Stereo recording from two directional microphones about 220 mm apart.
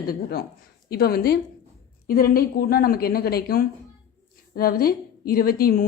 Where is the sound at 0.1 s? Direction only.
45° left (ahead or behind).